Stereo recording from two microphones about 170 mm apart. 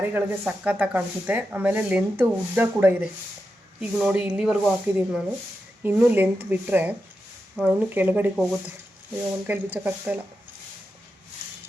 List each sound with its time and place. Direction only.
0.0 s speech: 10° right (ahead or behind)
9.5 s speech: 10° right (ahead or behind)